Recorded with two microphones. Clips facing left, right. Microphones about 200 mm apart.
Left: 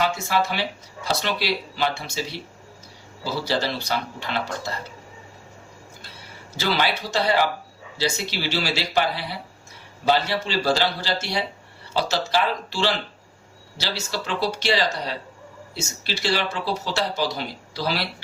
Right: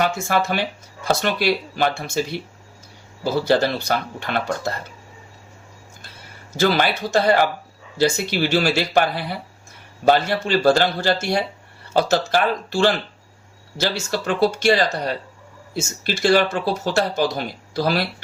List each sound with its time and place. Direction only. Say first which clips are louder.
0.0 s speech: right 2 dB; 50° right (ahead or behind)
6.6 s speech: right 5 dB; 50° right (ahead or behind)